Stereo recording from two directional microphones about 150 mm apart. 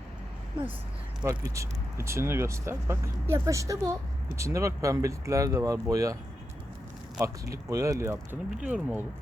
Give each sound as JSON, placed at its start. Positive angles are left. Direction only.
{"t": 1.2, "sound": "speech", "side_deg": -20}
{"t": 7.2, "sound": "speech", "side_deg": -20}
{"t": 8.4, "sound": "speech", "side_deg": -5}